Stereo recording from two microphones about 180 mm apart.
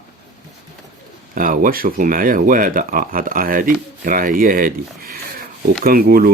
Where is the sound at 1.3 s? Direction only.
50° right (ahead or behind).